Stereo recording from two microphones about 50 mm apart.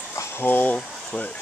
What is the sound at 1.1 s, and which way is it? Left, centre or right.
Speech, centre.